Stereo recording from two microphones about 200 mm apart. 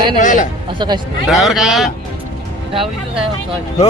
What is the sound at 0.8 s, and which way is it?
Speech, 20° right (ahead or behind).